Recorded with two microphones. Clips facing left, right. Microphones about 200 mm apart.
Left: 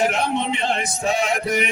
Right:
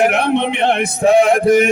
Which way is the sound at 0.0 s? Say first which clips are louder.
Right 7 dB; 60° right (ahead or behind).